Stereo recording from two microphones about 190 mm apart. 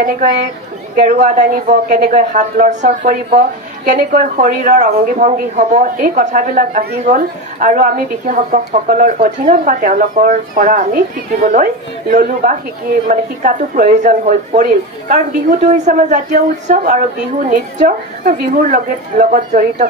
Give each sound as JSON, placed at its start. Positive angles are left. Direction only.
{"t": 0.0, "sound": "speech", "side_deg": -45}